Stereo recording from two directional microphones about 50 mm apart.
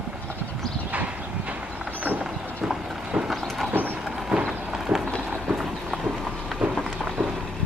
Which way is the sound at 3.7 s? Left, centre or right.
Right.